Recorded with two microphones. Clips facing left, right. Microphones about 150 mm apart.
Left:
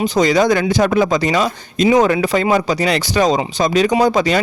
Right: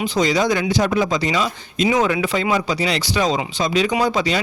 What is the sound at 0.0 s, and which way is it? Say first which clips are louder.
Speech: left 5 dB; 50° left (ahead or behind).